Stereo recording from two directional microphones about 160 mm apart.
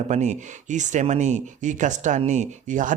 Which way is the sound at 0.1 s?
45° right (ahead or behind).